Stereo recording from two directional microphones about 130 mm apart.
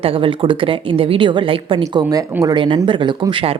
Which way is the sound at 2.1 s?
30° right (ahead or behind).